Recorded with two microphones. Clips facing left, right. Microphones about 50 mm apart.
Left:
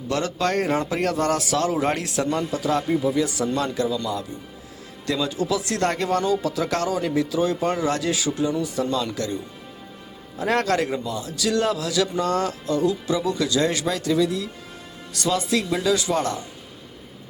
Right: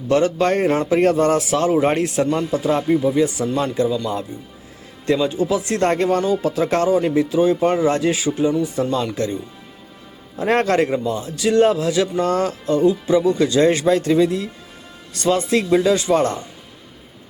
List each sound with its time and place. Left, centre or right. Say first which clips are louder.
0.1 s a man's voice: right 7 dB; right